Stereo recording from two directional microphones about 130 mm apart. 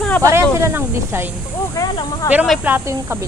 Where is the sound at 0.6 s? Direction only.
20° right (ahead or behind).